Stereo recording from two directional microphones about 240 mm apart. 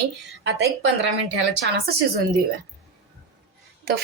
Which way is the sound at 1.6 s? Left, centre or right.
Right.